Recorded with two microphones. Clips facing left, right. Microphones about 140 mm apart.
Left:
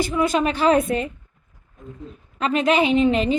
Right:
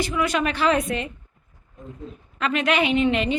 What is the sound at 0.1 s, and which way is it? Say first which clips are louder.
A woman's voice: left 3 dB; 35° left (ahead or behind).